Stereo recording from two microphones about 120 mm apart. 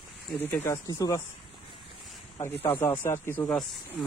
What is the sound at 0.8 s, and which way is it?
Speech, 30° left (ahead or behind).